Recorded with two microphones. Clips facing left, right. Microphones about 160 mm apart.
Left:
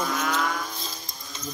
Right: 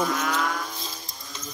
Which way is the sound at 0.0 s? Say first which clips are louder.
Right 1 dB; centre (ahead or behind).